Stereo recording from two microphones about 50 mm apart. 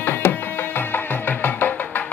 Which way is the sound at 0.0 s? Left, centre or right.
Left.